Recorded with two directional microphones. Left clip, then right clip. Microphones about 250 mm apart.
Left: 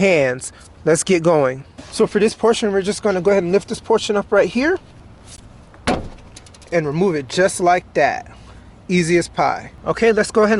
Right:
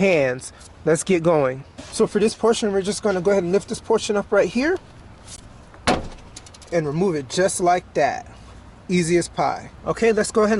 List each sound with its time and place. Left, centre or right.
0.0 s speech: centre
5.9 s vehicle: centre
6.3 s pigeon: centre
6.9 s speech: centre